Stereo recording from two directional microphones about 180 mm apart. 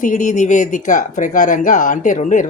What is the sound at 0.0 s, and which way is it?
Speech, 45° left (ahead or behind).